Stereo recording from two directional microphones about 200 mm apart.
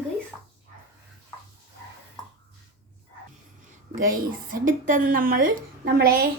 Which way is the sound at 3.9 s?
45° right (ahead or behind).